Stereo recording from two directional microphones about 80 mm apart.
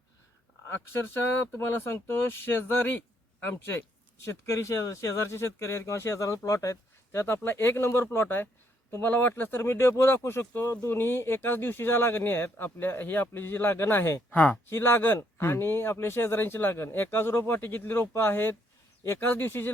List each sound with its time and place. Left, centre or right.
0.7 s speech: left
14.3 s speech: centre
14.7 s speech: left